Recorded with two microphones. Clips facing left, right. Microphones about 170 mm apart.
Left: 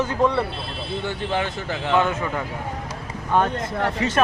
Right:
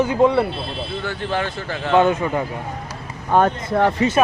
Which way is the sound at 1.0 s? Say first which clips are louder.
Even; 20° left (ahead or behind).